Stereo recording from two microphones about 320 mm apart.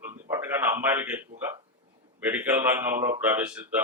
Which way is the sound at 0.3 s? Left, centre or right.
Centre.